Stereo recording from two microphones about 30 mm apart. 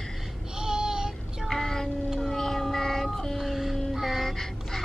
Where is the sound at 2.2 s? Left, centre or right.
Centre.